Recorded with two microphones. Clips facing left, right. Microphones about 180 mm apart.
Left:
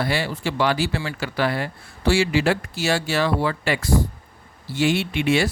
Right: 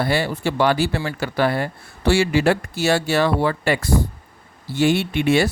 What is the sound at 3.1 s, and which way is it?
Speech, 55° right (ahead or behind).